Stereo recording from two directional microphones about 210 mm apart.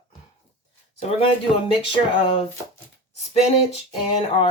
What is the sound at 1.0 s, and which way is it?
Speech, 30° left (ahead or behind).